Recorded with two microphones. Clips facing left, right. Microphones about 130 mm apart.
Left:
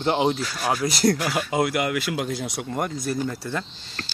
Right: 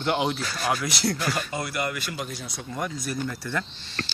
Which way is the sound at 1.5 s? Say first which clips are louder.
Left 7 dB; 90° left.